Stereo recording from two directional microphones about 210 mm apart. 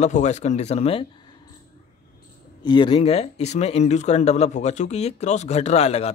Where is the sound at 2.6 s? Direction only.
20° left (ahead or behind).